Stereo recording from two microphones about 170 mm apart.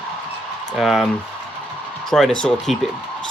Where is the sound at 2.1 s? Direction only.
Centre (ahead or behind).